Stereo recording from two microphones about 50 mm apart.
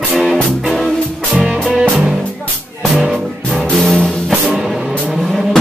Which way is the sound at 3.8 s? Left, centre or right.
Centre.